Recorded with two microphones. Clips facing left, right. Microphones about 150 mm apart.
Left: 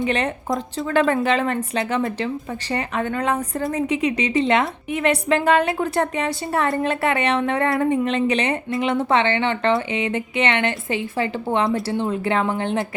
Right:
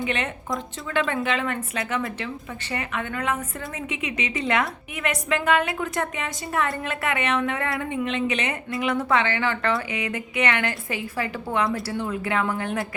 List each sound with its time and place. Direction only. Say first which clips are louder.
0.0 s a woman's voice: left 5 dB; 35° left (ahead or behind)